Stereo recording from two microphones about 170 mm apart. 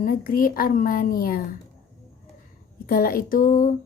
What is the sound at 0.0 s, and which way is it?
Speech, 55° left (ahead or behind).